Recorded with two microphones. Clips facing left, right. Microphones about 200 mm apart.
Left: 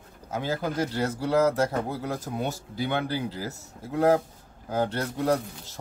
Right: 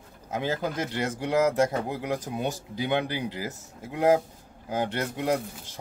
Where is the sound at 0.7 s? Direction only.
35° left (ahead or behind).